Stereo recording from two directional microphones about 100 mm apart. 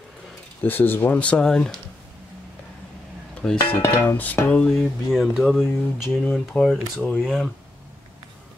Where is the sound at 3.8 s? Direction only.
20° left (ahead or behind).